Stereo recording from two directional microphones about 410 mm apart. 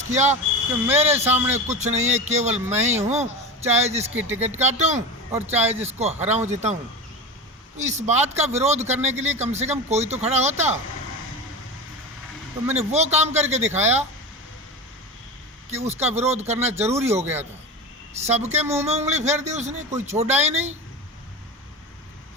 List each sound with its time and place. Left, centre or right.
0.0 s speech: centre
0.9 s speech: centre
1.6 s a man's voice: centre
4.1 s speech: centre
4.5 s a man's voice: centre
7.8 s a man's voice: centre
12.7 s a man's voice: centre
15.7 s a man's voice: centre